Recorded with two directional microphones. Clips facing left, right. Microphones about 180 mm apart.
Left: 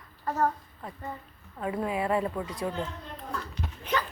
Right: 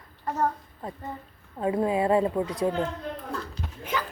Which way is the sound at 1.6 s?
25° right (ahead or behind).